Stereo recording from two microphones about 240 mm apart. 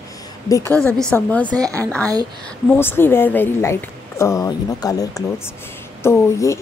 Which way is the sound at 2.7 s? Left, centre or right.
Centre.